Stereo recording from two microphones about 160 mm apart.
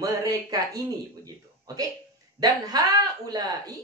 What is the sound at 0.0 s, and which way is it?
Speech, 20° right (ahead or behind).